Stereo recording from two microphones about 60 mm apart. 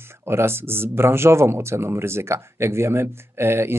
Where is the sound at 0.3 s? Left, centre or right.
Right.